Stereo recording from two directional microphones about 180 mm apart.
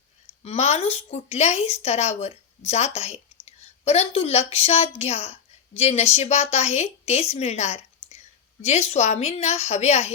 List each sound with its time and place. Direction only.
0.4 s a woman's voice: 35° left (ahead or behind)